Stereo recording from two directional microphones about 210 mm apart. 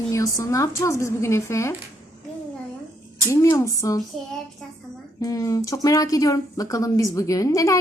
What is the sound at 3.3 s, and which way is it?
Speech, 15° left (ahead or behind).